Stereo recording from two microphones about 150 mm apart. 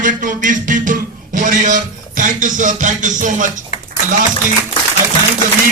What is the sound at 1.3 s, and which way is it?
Music, 55° right (ahead or behind).